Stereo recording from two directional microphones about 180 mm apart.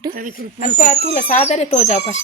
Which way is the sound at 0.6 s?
50° left (ahead or behind).